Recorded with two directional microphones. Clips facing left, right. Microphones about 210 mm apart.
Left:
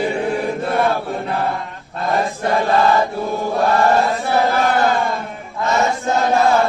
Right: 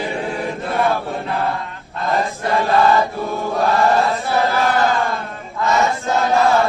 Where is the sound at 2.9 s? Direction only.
Centre (ahead or behind).